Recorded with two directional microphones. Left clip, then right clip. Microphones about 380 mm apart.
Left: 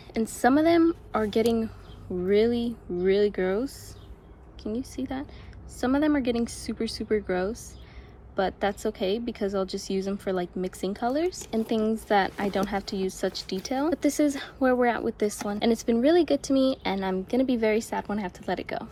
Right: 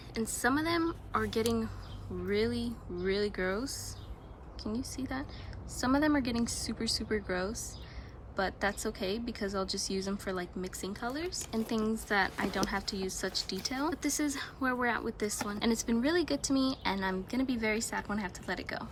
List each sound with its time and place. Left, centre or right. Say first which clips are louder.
0.1 s a woman's voice: left 8 dB; centre